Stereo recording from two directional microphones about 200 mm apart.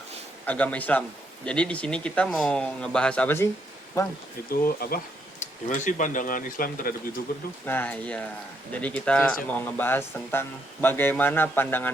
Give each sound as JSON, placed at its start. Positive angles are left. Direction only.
{"t": 0.4, "sound": "speech", "side_deg": 5}
{"t": 4.6, "sound": "speech", "side_deg": 50}
{"t": 5.4, "sound": "speech", "side_deg": 40}
{"t": 7.6, "sound": "speech", "side_deg": 10}